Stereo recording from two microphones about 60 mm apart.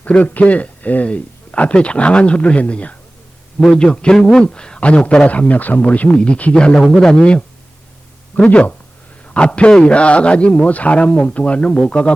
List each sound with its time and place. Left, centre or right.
0.0 s a man's voice: left
3.6 s a man's voice: centre